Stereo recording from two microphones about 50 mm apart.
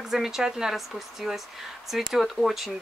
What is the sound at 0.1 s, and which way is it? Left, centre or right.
Speech, centre.